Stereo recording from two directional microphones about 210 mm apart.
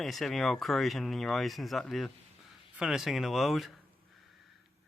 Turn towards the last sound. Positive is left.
turn(degrees=0)  # may be behind; listen again after turning